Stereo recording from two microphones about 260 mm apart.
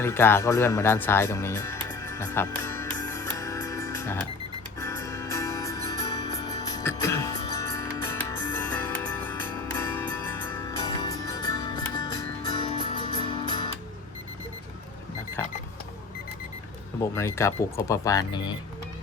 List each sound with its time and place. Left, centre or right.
0.0 s music: centre
10.3 s music: centre
15.4 s alarm clock: centre
17.0 s speech: centre